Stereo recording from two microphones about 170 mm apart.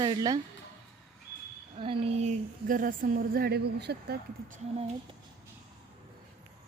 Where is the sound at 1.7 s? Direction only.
35° right (ahead or behind).